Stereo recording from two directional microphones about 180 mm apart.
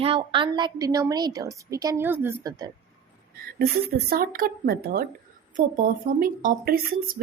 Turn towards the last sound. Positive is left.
turn(degrees=-55)  # may be behind; listen again after turning